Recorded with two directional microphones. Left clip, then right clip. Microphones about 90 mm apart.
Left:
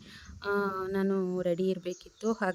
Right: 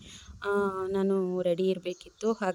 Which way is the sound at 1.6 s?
35° right (ahead or behind).